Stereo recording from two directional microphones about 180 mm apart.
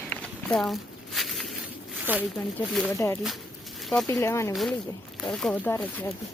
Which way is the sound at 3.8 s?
Centre (ahead or behind).